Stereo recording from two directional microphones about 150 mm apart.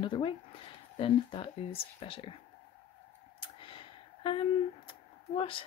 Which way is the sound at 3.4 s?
35° left (ahead or behind).